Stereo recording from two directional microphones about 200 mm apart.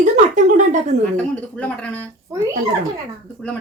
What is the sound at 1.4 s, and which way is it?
Speech, 5° left (ahead or behind).